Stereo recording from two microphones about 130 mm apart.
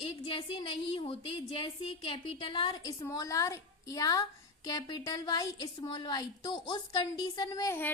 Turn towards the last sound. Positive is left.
turn(degrees=25)  # may be behind; listen again after turning